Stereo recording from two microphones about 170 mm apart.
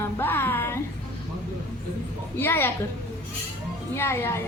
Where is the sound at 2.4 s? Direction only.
15° left (ahead or behind).